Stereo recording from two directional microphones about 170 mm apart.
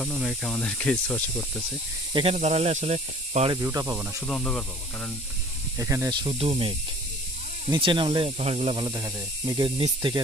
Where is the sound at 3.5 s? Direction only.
20° right (ahead or behind).